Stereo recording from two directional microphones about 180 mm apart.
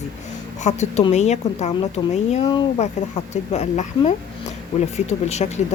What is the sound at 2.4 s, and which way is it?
Speech, 25° left (ahead or behind).